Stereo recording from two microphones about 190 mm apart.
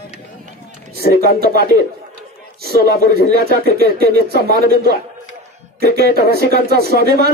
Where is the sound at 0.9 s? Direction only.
55° left (ahead or behind).